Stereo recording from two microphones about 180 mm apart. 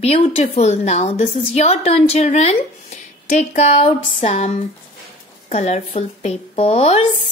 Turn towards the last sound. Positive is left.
turn(degrees=35)  # may be behind; listen again after turning